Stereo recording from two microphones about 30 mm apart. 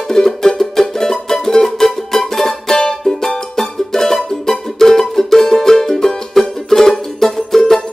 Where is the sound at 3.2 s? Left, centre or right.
Centre.